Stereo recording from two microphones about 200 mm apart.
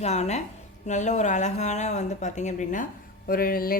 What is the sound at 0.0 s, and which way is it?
A woman's voice, 35° left (ahead or behind).